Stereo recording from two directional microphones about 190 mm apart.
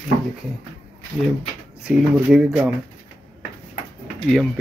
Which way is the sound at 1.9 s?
5° right (ahead or behind).